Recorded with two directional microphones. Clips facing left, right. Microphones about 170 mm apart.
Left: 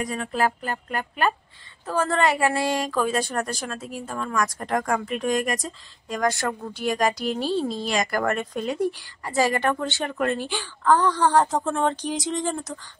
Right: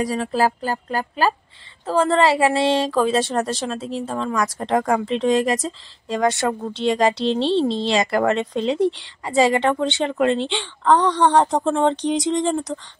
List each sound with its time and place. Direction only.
0.0 s a woman's voice: 35° right (ahead or behind)